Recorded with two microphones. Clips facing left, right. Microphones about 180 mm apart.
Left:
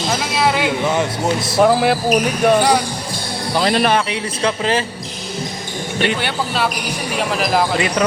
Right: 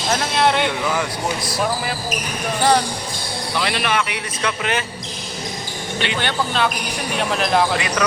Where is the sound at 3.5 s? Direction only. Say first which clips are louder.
Left 6 dB; 35° left (ahead or behind).